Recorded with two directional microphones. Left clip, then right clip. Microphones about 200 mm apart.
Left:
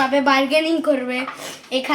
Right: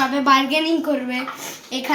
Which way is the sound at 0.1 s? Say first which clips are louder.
Even; 15° left (ahead or behind).